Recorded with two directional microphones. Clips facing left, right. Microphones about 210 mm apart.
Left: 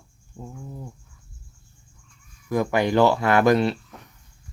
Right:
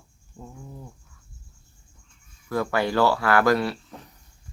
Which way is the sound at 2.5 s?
15° left (ahead or behind).